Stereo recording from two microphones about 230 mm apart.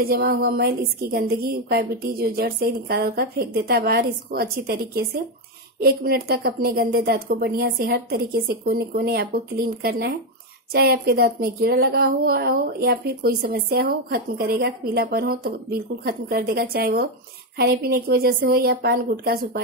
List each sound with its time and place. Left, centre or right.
0.0 s a woman's voice: right